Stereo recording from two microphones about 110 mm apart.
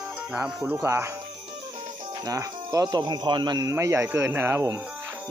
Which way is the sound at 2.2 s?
35° right (ahead or behind).